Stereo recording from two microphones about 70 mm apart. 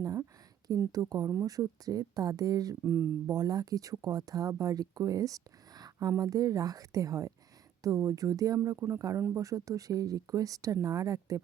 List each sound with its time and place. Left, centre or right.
0.0 s a sound: right
0.9 s speech: right
2.8 s speech: right
3.2 s speech: right
8.5 s speech: right